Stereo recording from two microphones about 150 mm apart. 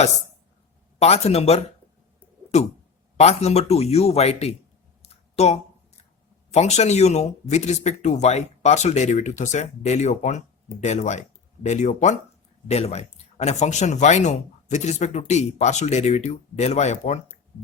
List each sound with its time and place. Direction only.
0.9 s speech: 45° left (ahead or behind)
5.0 s a sound: 45° left (ahead or behind)
6.5 s speech: 50° left (ahead or behind)